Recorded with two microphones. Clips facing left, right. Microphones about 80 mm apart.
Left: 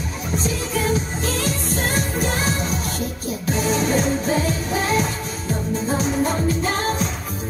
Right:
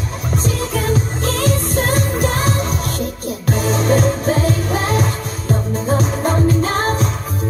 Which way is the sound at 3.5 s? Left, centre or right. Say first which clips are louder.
Right 4 dB; right.